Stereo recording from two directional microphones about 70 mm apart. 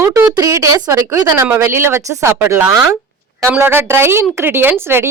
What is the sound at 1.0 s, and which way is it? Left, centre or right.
Speech, right.